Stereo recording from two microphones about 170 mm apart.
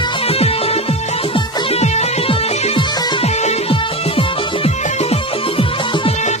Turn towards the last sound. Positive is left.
turn(degrees=35)  # may be behind; listen again after turning